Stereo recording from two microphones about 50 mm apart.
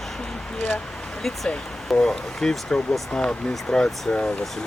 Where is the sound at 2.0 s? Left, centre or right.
Centre.